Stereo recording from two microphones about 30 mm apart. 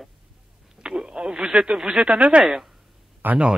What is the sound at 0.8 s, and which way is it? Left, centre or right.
Radio, right.